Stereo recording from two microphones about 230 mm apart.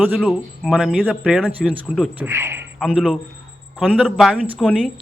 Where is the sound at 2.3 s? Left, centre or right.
Centre.